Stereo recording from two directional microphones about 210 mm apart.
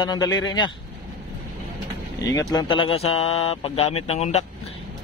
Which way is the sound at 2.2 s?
15° left (ahead or behind).